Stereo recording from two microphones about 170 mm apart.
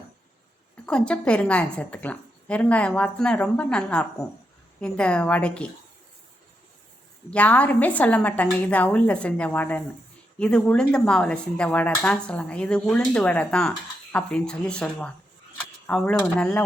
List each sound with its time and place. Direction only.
0.9 s a woman's voice: 5° left (ahead or behind)
7.3 s a woman's voice: 10° left (ahead or behind)